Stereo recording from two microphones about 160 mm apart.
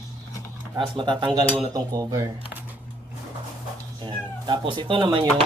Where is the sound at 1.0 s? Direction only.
30° right (ahead or behind).